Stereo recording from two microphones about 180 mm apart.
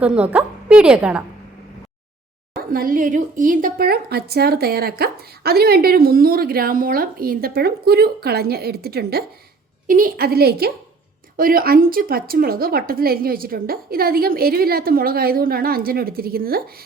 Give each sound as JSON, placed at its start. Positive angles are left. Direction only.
{"t": 0.0, "sound": "a woman's voice", "side_deg": -5}
{"t": 2.7, "sound": "a woman's voice", "side_deg": -50}
{"t": 9.8, "sound": "a woman's voice", "side_deg": -50}